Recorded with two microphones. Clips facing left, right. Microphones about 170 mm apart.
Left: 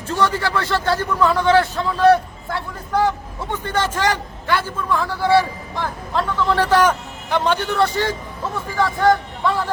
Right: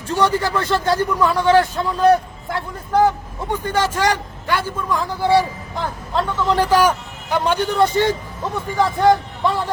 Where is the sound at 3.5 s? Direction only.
10° right (ahead or behind).